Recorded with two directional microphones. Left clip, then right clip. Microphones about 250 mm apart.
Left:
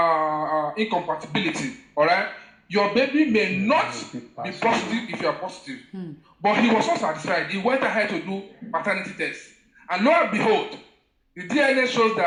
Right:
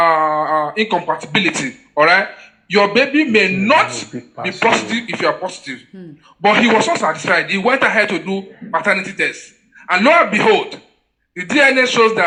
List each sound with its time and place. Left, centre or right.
0.0 s a sound: right
2.6 s speech: right
5.9 s a man's voice: centre
6.4 s speech: right